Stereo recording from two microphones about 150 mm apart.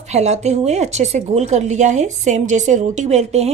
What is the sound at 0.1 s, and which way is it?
A woman's voice, 50° right (ahead or behind).